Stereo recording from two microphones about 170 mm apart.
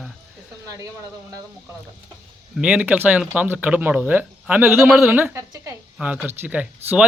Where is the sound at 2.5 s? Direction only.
5° right (ahead or behind).